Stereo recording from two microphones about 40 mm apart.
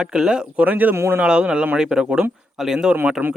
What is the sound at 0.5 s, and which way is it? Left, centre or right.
Speech, right.